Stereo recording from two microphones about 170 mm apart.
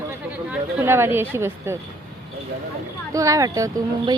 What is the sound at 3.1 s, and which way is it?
Speech, 20° right (ahead or behind).